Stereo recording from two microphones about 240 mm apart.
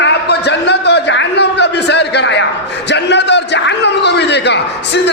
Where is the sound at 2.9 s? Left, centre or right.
Left.